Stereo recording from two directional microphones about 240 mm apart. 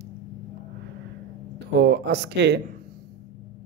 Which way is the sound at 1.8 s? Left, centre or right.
Right.